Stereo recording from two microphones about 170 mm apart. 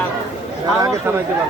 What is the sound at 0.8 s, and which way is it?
Speech, 15° right (ahead or behind).